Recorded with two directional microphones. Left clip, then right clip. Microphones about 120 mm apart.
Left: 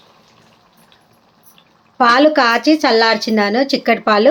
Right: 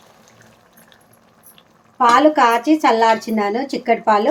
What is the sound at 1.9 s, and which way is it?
Speech, 70° left (ahead or behind).